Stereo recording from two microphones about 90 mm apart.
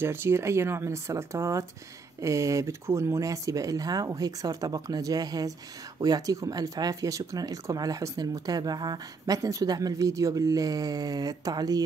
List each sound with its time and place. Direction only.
0.0 s speech: 25° right (ahead or behind); by 11.8 s 45° right (ahead or behind)